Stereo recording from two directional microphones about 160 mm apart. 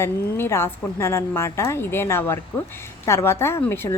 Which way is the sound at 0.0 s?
15° left (ahead or behind).